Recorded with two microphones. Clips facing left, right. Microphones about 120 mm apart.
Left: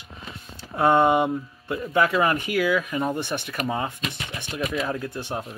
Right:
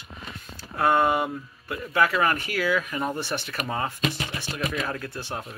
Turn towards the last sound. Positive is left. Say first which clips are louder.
# left 3 dB
turn(degrees=15)  # may be behind; listen again after turning